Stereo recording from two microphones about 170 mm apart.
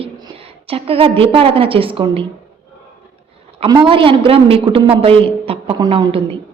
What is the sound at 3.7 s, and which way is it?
A woman's voice, 30° right (ahead or behind).